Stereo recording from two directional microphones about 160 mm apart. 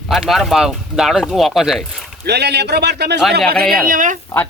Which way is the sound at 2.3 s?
90° right.